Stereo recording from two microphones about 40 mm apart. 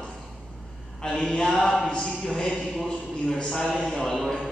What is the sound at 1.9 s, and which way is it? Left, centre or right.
A man's voice, centre.